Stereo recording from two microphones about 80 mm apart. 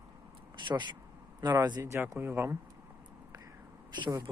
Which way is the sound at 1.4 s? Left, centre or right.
Right.